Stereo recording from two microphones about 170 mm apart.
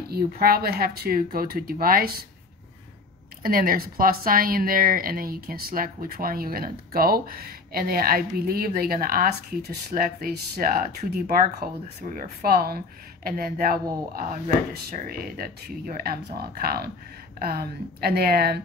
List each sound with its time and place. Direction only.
0.1 s speech: 65° right (ahead or behind)
3.4 s speech: 60° right (ahead or behind)